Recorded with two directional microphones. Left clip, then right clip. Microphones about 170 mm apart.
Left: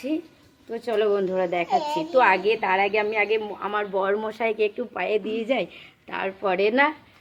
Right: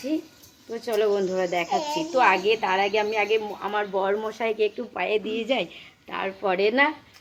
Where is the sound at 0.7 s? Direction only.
20° left (ahead or behind).